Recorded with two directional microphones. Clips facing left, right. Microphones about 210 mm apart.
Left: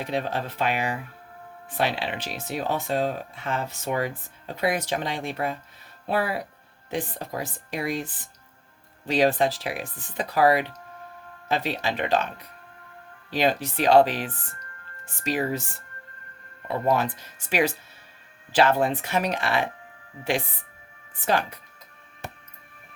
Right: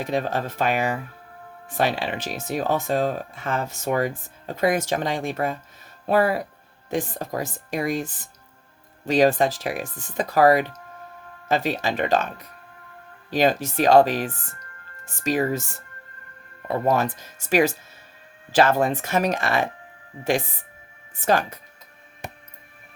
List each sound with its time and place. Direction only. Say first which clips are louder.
0.0 s speech: right 3 dB; 45° right (ahead or behind)
16.6 s speech: right 2 dB; 45° right (ahead or behind)
21.2 s speech: right 3 dB; 45° right (ahead or behind)
22.2 s music: right 1 dB; 15° right (ahead or behind)